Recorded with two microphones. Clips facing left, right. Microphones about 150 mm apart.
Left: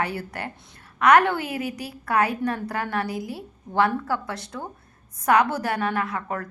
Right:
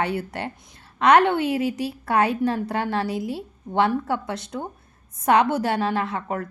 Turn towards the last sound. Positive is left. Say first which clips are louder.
# right 2 dB
turn(degrees=-25)  # may be behind; listen again after turning